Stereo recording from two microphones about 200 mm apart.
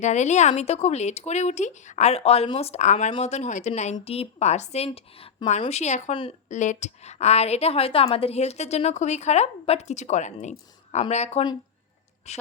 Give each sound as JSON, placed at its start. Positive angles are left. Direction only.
{"t": 0.0, "sound": "speech", "side_deg": 35}